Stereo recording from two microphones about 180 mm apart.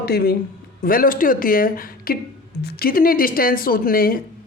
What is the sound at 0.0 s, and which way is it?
Speech, 60° left (ahead or behind).